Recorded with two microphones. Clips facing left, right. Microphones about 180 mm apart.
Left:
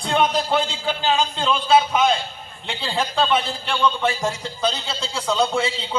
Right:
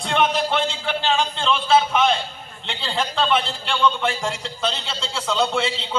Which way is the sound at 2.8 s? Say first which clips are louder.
Left 1 dB; 15° left (ahead or behind).